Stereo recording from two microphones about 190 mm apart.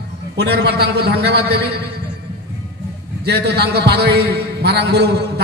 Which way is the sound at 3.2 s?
60° right (ahead or behind).